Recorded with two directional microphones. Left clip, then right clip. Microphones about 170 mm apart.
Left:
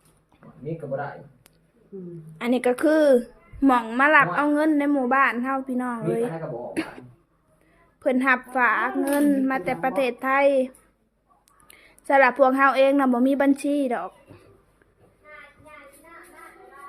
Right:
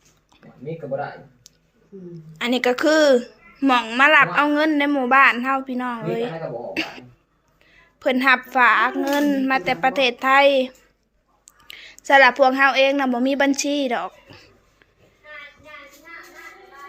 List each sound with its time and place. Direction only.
2.4 s a woman's voice: 15° left (ahead or behind)
7.9 s a woman's voice: 10° left (ahead or behind)